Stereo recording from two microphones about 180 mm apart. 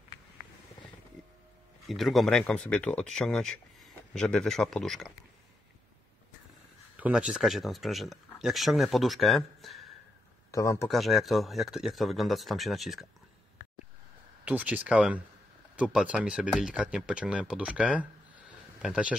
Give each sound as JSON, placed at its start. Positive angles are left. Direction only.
{"t": 1.9, "sound": "speech", "side_deg": 0}
{"t": 7.0, "sound": "speech", "side_deg": -5}
{"t": 10.5, "sound": "speech", "side_deg": 15}
{"t": 10.9, "sound": "speech", "side_deg": 0}
{"t": 14.4, "sound": "speech", "side_deg": -10}